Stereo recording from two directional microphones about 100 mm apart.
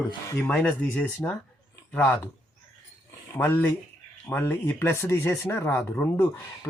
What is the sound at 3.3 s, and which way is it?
Speech, 20° left (ahead or behind).